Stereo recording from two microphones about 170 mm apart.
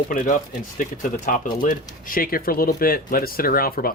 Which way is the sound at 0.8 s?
50° left (ahead or behind).